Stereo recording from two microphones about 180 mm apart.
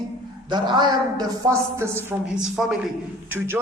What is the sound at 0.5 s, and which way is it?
A man's voice, 25° right (ahead or behind).